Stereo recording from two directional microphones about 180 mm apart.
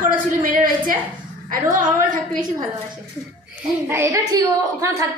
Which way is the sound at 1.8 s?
45° right (ahead or behind).